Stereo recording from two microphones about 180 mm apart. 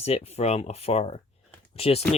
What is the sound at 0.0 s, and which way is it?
Speech, 35° left (ahead or behind).